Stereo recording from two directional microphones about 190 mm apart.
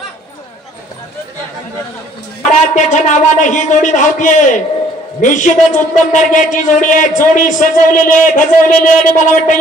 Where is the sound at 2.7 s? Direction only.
40° left (ahead or behind).